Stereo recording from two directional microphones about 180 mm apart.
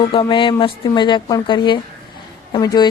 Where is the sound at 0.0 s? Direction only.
30° left (ahead or behind).